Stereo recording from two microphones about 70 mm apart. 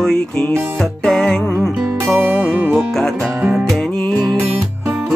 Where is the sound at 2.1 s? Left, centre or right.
Right.